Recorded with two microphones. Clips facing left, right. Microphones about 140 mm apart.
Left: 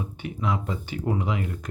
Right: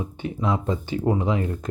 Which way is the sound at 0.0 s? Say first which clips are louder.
Right 3 dB; 30° right (ahead or behind).